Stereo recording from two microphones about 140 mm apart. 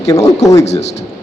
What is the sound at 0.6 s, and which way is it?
Speech, 50° left (ahead or behind).